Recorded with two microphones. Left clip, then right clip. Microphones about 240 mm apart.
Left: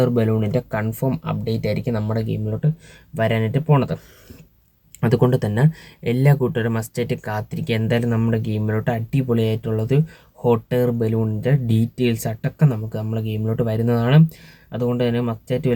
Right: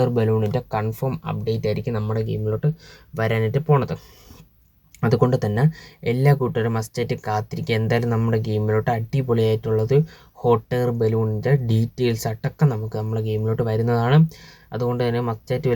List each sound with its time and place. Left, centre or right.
0.2 s speech: centre